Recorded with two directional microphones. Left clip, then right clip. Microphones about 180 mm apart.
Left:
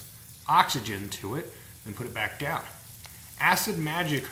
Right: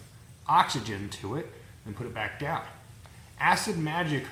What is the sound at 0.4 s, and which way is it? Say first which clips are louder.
Speech: left 1 dB; 20° left (ahead or behind).